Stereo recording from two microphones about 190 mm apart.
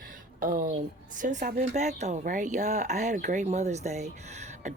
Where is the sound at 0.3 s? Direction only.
45° right (ahead or behind).